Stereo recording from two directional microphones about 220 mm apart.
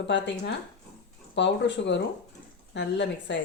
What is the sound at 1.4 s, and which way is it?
A woman's voice, 55° left (ahead or behind).